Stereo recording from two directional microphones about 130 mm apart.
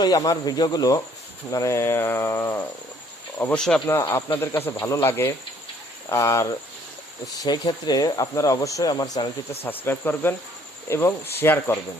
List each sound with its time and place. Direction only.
0.0 s speech: 30° left (ahead or behind); by 3.8 s 5° left (ahead or behind)
4.1 s speech: 20° left (ahead or behind)
9.6 s speech: 15° left (ahead or behind)